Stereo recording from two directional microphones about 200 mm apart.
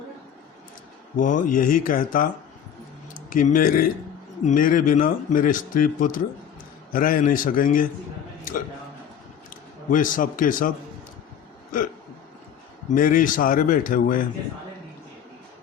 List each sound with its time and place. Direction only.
1.1 s a man's voice: 40° left (ahead or behind)
9.9 s a man's voice: 40° left (ahead or behind)
12.9 s a man's voice: 45° left (ahead or behind)